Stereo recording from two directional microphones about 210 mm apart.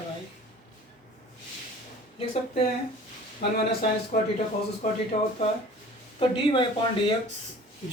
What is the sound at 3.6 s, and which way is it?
A man's voice, 50° left (ahead or behind).